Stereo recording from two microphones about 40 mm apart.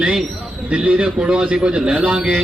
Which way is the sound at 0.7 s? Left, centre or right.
Right.